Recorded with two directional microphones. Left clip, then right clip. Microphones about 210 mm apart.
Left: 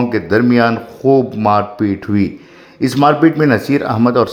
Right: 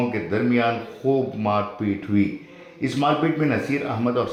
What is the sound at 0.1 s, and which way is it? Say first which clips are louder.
Speech: left 10 dB; 55° left (ahead or behind).